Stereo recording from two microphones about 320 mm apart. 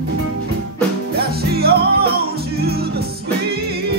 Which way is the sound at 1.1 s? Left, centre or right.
Right.